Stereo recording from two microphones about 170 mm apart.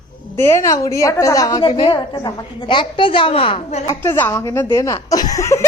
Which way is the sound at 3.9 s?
15° left (ahead or behind).